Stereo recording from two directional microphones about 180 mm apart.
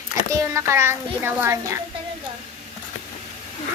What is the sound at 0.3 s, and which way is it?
A child's voice, 15° right (ahead or behind).